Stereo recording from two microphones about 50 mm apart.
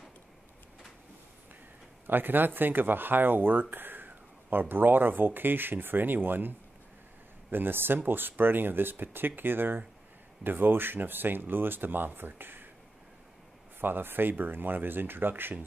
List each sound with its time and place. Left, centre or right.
2.0 s speech: right
7.5 s speech: right
13.7 s speech: right